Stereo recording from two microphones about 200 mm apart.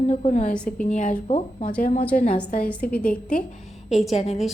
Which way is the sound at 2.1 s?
45° left (ahead or behind).